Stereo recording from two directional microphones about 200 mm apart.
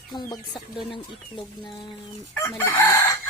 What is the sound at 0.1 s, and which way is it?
Speech, 20° left (ahead or behind).